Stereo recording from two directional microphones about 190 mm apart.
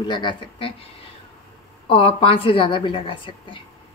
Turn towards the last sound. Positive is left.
turn(degrees=25)  # may be behind; listen again after turning